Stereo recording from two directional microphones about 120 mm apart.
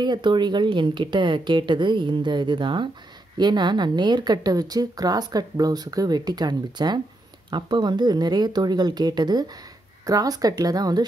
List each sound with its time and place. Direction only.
0.0 s speech: 40° right (ahead or behind)